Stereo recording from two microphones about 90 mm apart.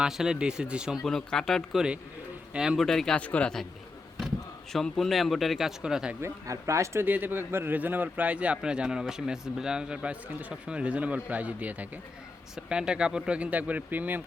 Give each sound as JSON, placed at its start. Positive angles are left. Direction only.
{"t": 0.0, "sound": "a man's voice", "side_deg": -5}
{"t": 1.0, "sound": "speech", "side_deg": 5}
{"t": 2.5, "sound": "a man's voice", "side_deg": -5}
{"t": 2.8, "sound": "speech", "side_deg": 5}
{"t": 3.2, "sound": "speech", "side_deg": 15}
{"t": 4.7, "sound": "speech", "side_deg": 5}
{"t": 6.2, "sound": "speech", "side_deg": -35}
{"t": 7.0, "sound": "a man's voice", "side_deg": -20}